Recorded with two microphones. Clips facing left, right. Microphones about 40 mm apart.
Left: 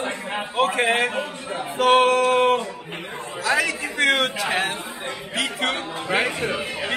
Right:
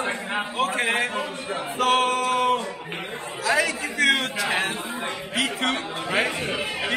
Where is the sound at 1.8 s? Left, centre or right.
Centre.